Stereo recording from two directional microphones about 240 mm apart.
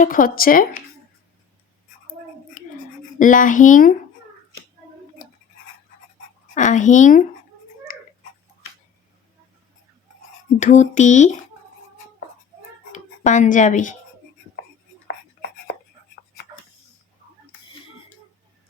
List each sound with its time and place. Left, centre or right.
0.0 s speech: left
2.6 s writing: left
3.2 s speech: left
6.5 s speech: left
7.9 s tick-tock: left
10.6 s speech: left
12.9 s speech: left
15.0 s whispering: left